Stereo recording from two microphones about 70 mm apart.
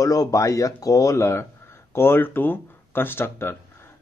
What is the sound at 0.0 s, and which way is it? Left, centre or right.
Speech, left.